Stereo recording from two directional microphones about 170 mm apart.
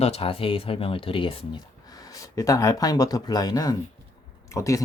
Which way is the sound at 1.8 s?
20° left (ahead or behind).